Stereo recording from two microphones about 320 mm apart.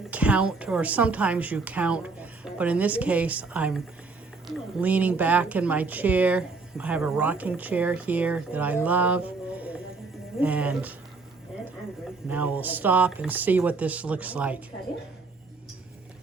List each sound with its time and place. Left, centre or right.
0.1 s speech: centre
10.4 s speech: centre
12.3 s speech: centre